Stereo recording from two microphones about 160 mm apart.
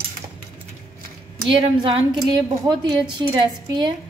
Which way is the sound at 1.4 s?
30° right (ahead or behind).